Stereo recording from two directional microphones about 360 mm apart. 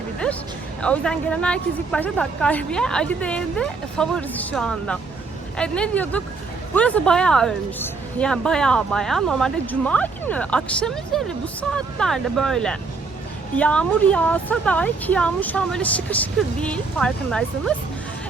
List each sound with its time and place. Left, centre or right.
0.8 s speech: centre